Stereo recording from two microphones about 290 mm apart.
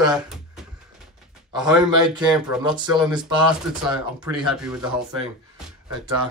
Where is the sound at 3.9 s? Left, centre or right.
Centre.